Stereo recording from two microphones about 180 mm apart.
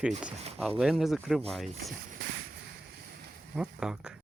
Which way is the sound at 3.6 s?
5° right (ahead or behind).